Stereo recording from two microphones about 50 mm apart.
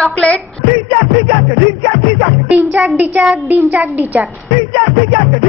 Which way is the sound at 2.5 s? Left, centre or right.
Right.